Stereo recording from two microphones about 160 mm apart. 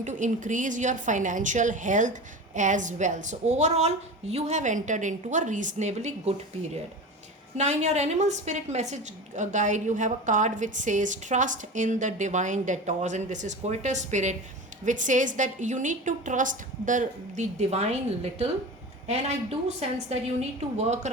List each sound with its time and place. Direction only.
0.0 s a woman's voice: 50° right (ahead or behind)
7.5 s a woman's voice: 45° right (ahead or behind)